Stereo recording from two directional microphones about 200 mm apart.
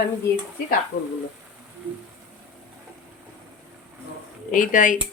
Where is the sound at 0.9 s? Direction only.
40° left (ahead or behind).